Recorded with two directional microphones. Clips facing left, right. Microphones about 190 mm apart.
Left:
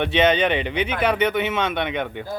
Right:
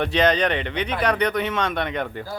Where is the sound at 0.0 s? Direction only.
5° left (ahead or behind).